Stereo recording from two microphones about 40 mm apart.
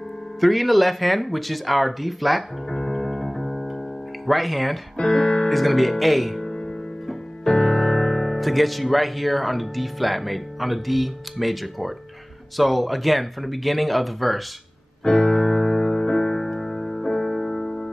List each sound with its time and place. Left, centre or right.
0.4 s speech: centre
4.9 s speech: centre
5.5 s speech: centre
7.4 s speech: centre
15.0 s music: centre